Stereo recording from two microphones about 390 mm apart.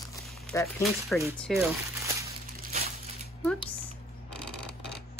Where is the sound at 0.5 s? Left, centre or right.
Centre.